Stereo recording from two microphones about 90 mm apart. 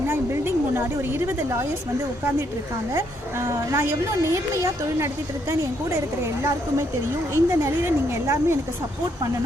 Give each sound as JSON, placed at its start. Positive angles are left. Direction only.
{"t": 0.1, "sound": "a sound", "side_deg": -25}
{"t": 3.4, "sound": "speech", "side_deg": -30}
{"t": 7.3, "sound": "speech", "side_deg": -25}